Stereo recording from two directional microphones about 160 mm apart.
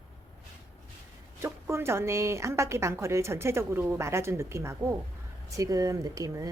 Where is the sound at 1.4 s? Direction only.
15° right (ahead or behind).